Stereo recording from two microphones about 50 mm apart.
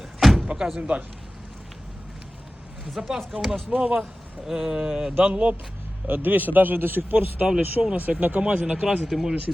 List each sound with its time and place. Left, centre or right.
0.2 s door: centre
0.4 s speech: centre
2.8 s speech: centre
3.7 s speech: right
4.4 s speech: centre
5.2 s speech: right
6.1 s speech: right
7.4 s speech: centre
8.1 s speech: right
8.6 s speech: centre
9.0 s speech: centre